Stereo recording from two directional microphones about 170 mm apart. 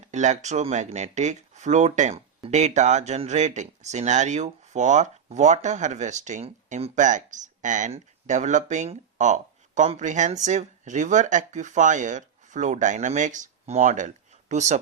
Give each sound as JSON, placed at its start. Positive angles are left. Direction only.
{"t": 0.0, "sound": "speech", "side_deg": -45}